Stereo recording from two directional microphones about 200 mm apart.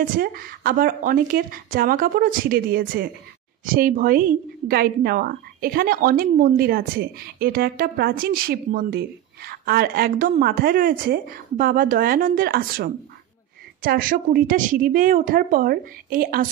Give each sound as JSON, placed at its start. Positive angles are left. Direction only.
{"t": 0.0, "sound": "a woman's voice", "side_deg": -45}